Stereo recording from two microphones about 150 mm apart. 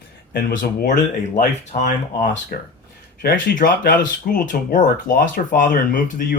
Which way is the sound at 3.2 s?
65° left (ahead or behind).